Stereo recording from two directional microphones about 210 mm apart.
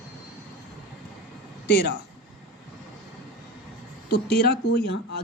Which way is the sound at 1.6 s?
50° left (ahead or behind).